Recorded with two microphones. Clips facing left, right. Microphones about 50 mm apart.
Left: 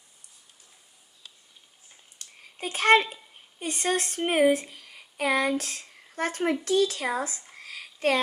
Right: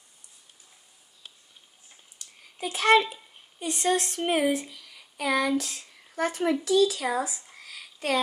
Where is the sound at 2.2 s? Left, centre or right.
Left.